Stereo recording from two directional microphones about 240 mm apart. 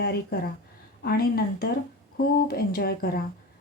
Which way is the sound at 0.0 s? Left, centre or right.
Left.